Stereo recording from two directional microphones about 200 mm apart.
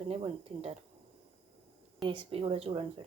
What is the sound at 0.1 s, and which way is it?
Speech, 30° right (ahead or behind).